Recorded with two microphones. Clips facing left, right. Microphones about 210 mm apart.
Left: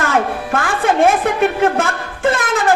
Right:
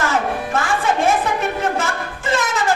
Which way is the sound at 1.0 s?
55° left (ahead or behind).